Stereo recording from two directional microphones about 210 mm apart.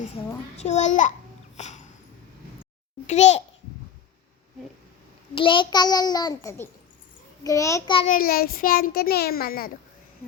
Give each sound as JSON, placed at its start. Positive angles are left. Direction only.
{"t": 0.5, "sound": "a child's voice", "side_deg": 35}
{"t": 1.5, "sound": "dog", "side_deg": 35}
{"t": 3.1, "sound": "a child's voice", "side_deg": 30}
{"t": 5.3, "sound": "a child's voice", "side_deg": 25}
{"t": 7.9, "sound": "a child's voice", "side_deg": 35}